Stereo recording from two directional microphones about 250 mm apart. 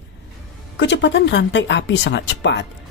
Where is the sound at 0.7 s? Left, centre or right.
Left.